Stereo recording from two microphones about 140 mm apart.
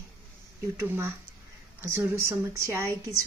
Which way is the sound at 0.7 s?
15° right (ahead or behind).